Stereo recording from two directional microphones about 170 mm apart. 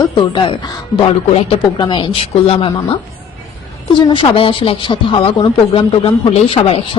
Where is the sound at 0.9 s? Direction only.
50° left (ahead or behind).